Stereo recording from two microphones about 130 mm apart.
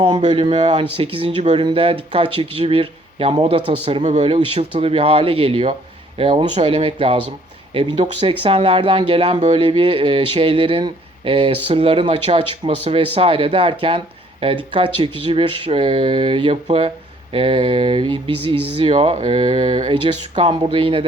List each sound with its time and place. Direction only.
0.2 s speech: 50° right (ahead or behind)
0.9 s speech: 45° right (ahead or behind)
4.0 s speech: 65° right (ahead or behind)
4.3 s speech: 45° right (ahead or behind)